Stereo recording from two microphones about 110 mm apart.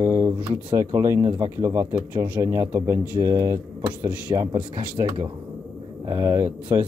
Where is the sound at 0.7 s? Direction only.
30° right (ahead or behind).